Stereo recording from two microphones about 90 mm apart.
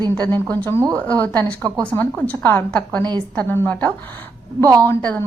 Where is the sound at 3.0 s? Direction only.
55° right (ahead or behind).